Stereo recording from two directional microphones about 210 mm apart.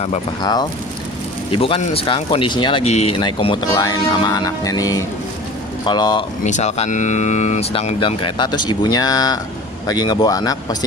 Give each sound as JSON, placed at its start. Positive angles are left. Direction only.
{"t": 0.4, "sound": "speech", "side_deg": 20}
{"t": 6.4, "sound": "speech", "side_deg": 35}